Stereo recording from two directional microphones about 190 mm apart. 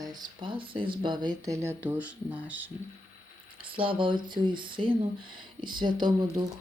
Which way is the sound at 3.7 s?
25° right (ahead or behind).